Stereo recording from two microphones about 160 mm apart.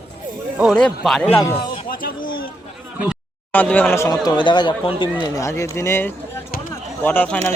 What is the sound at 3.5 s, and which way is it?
Speech, 10° left (ahead or behind).